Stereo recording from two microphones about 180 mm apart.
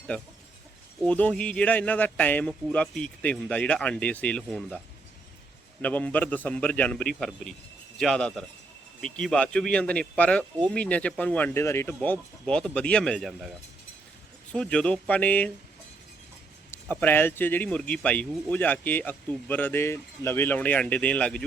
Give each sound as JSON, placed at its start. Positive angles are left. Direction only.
{"t": 1.0, "sound": "speech", "side_deg": 5}
{"t": 5.8, "sound": "speech", "side_deg": 10}
{"t": 14.5, "sound": "speech", "side_deg": 5}
{"t": 16.7, "sound": "speech", "side_deg": 10}